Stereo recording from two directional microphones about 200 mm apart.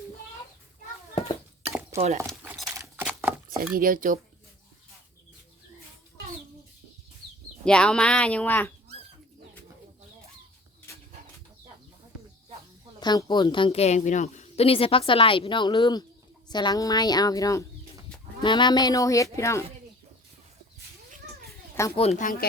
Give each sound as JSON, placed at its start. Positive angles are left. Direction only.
{"t": 1.9, "sound": "a sound", "side_deg": -15}
{"t": 3.8, "sound": "speech", "side_deg": -45}
{"t": 7.6, "sound": "speech", "side_deg": 5}
{"t": 10.9, "sound": "bird flight", "side_deg": 15}
{"t": 13.0, "sound": "a woman's voice", "side_deg": 20}
{"t": 21.9, "sound": "speech", "side_deg": 30}